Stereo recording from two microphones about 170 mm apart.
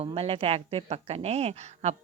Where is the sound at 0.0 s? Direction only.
35° right (ahead or behind).